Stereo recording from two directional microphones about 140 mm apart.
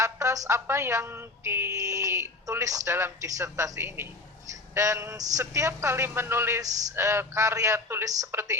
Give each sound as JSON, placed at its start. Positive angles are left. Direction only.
{"t": 0.0, "sound": "a woman's voice", "side_deg": -20}